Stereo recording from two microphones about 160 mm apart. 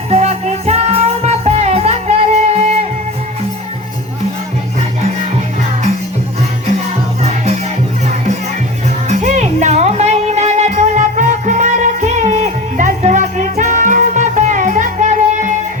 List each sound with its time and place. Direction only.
0.1 s music: 40° right (ahead or behind)
7.2 s music: 45° right (ahead or behind)